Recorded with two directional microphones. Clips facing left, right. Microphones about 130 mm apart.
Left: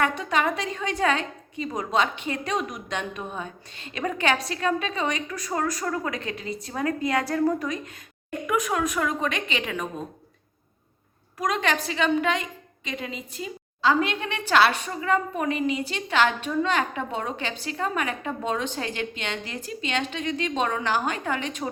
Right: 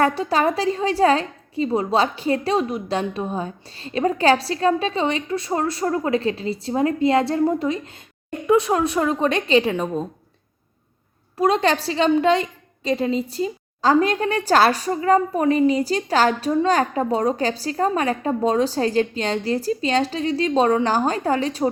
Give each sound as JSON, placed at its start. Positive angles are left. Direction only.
{"t": 0.0, "sound": "a woman's voice", "side_deg": -35}
{"t": 11.3, "sound": "a woman's voice", "side_deg": -30}